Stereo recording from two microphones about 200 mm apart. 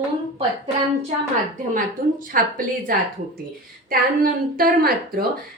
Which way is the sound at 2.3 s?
40° right (ahead or behind).